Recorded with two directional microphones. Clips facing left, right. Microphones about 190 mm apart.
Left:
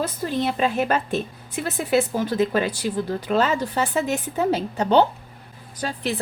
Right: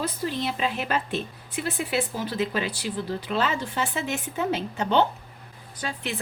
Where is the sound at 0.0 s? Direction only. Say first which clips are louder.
Left 4 dB; 45° left (ahead or behind).